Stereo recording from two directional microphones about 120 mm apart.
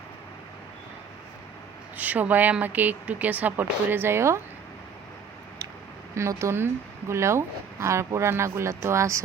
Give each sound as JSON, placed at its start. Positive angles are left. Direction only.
{"t": 2.0, "sound": "speech", "side_deg": -15}
{"t": 6.1, "sound": "speech", "side_deg": -25}